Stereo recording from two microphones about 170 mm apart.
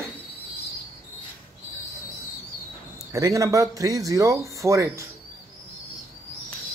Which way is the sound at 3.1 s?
20° right (ahead or behind).